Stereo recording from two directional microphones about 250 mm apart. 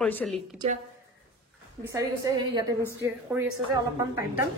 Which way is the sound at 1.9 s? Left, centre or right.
Centre.